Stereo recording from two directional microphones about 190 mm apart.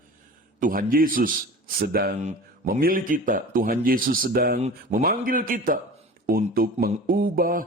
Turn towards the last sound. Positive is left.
turn(degrees=-50)  # may be behind; listen again after turning